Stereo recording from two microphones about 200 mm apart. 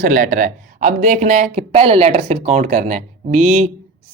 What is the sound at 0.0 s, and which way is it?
Speech, 45° right (ahead or behind).